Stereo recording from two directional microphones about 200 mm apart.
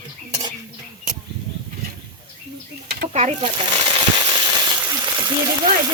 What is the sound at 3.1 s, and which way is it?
Speech, 35° right (ahead or behind).